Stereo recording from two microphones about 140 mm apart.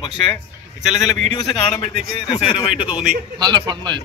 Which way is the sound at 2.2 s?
35° left (ahead or behind).